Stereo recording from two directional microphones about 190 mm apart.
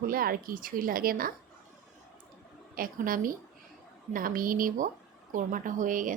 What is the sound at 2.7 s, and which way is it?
Speech, 50° right (ahead or behind).